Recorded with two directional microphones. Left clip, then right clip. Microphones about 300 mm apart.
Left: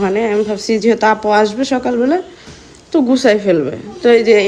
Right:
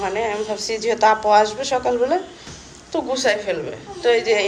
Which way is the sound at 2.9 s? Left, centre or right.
Centre.